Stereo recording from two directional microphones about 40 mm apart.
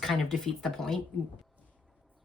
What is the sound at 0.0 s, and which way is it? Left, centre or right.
Speech, centre.